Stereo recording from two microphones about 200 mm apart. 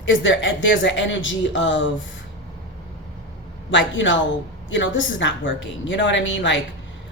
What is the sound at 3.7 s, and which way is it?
A woman's voice, 65° left (ahead or behind).